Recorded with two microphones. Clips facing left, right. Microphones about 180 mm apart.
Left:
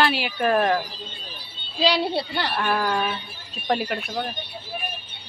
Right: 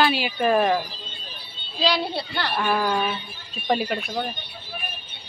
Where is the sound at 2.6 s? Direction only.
5° right (ahead or behind).